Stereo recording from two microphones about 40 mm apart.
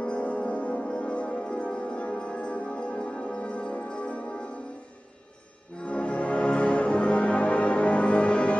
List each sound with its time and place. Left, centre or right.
0.0 s music: left
5.9 s music: left